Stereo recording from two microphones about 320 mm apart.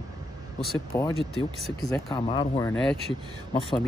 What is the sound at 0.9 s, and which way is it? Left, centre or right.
Speech, centre.